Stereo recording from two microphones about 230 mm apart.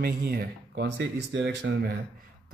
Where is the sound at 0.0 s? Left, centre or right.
Right.